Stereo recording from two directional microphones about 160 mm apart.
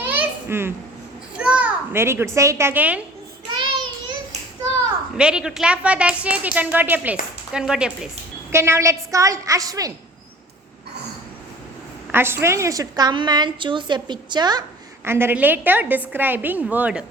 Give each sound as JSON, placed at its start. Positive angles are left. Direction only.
{"t": 0.0, "sound": "babbling", "side_deg": -10}
{"t": 1.4, "sound": "a child's voice", "side_deg": -10}
{"t": 5.1, "sound": "a woman's voice", "side_deg": -5}
{"t": 8.5, "sound": "a woman's voice", "side_deg": -15}
{"t": 12.1, "sound": "a woman's voice", "side_deg": -15}
{"t": 15.0, "sound": "a woman's voice", "side_deg": -15}